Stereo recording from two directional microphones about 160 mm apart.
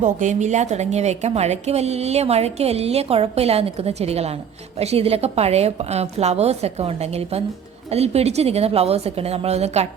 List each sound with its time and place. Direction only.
0.0 s a woman's voice: 50° right (ahead or behind)